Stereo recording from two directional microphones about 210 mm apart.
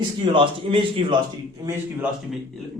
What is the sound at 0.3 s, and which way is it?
Speech, 25° right (ahead or behind).